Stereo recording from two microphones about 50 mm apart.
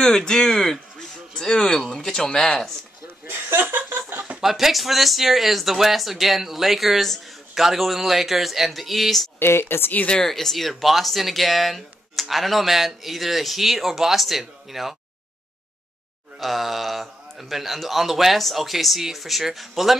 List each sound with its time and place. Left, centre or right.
0.0 s speech: centre
3.3 s chuckle: right
4.4 s speech: centre
9.4 s speech: left
10.2 s speech: centre
16.3 s speech: centre